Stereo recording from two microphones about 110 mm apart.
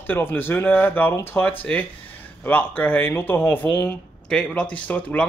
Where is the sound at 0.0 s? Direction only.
20° left (ahead or behind).